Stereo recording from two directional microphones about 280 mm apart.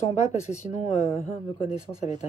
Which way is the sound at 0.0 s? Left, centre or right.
Left.